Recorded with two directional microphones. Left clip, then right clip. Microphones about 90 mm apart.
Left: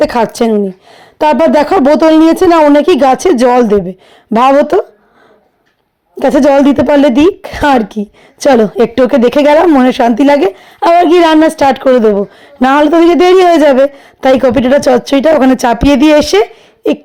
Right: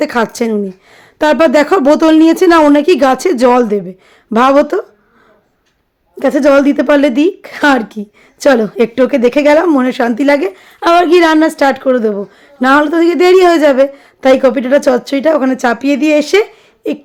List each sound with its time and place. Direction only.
0.0 s a woman's voice: 20° left (ahead or behind)
6.1 s a woman's voice: 40° left (ahead or behind)
10.5 s a woman's voice: 25° left (ahead or behind)
11.5 s a woman's voice: 45° left (ahead or behind)